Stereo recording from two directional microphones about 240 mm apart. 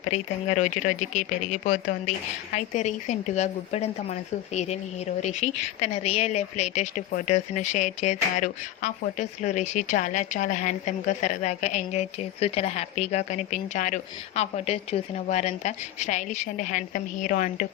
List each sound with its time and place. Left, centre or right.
0.0 s speech: left